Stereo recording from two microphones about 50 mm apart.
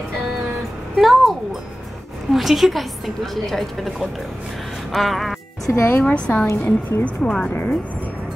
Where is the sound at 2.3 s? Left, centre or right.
Centre.